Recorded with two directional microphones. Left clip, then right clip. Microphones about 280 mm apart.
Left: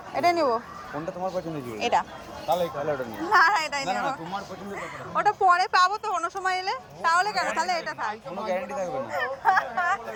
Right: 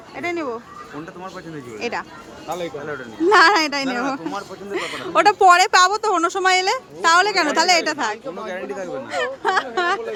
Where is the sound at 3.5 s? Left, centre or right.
Right.